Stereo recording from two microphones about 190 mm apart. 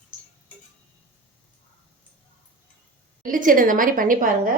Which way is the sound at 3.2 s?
45° right (ahead or behind).